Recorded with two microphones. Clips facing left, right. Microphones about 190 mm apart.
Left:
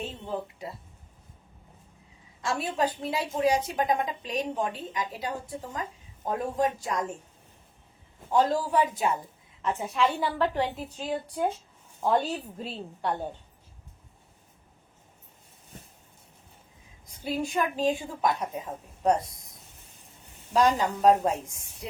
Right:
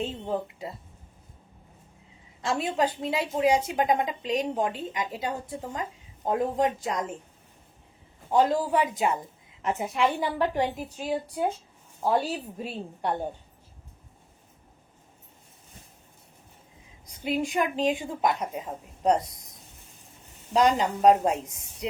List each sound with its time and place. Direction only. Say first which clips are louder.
0.0 s a woman's voice: right 4 dB; 25° right (ahead or behind)
2.4 s a woman's voice: right 2 dB; 20° right (ahead or behind)
8.3 s a woman's voice: right 2 dB; 15° right (ahead or behind)
17.2 s a woman's voice: right 2 dB; 20° right (ahead or behind)
20.5 s a woman's voice: right 1 dB; 20° right (ahead or behind)